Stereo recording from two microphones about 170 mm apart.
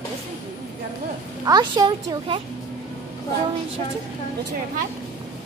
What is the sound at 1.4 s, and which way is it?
Speech, 25° right (ahead or behind).